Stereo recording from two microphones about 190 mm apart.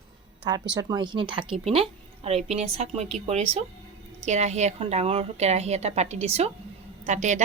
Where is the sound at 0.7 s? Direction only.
20° right (ahead or behind).